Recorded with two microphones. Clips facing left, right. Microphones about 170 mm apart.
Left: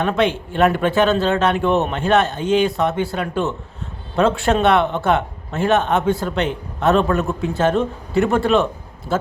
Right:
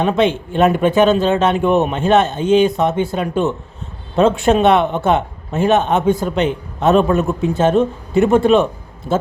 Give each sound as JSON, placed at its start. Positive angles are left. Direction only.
{"t": 0.0, "sound": "a man's voice", "side_deg": -20}